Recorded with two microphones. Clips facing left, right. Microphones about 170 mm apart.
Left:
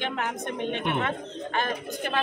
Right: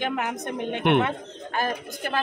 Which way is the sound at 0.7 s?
70° right (ahead or behind).